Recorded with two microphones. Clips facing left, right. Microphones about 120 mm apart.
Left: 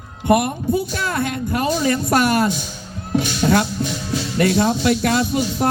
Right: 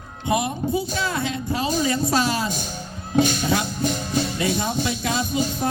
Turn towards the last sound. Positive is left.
turn(degrees=60)  # may be behind; listen again after turning